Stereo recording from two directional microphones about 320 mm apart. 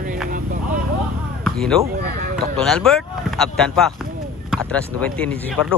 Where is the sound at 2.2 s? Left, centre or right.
Right.